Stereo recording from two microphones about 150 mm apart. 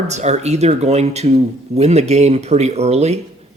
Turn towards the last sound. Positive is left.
turn(degrees=-45)  # may be behind; listen again after turning